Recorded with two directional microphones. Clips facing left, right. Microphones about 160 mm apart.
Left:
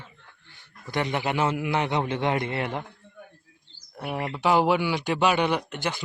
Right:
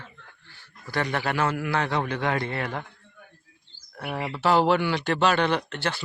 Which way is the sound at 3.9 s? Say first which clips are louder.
Left 1 dB; 20° left (ahead or behind).